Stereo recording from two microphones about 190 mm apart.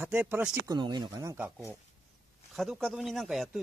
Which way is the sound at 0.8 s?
25° right (ahead or behind).